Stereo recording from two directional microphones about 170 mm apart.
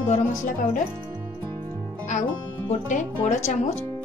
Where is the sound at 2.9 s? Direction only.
45° left (ahead or behind).